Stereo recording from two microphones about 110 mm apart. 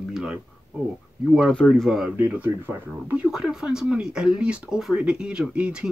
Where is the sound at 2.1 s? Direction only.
10° right (ahead or behind).